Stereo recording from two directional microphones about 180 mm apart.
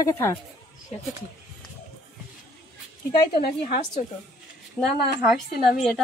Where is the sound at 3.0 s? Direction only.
55° left (ahead or behind).